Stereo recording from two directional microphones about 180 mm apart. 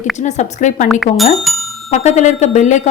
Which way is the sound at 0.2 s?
40° left (ahead or behind).